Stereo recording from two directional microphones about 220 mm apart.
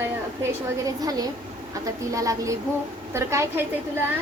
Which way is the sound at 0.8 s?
15° right (ahead or behind).